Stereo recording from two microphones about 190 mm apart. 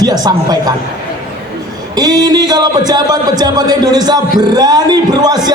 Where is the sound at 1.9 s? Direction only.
20° right (ahead or behind).